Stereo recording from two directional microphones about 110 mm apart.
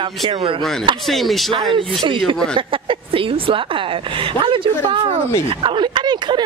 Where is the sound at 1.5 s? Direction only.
50° right (ahead or behind).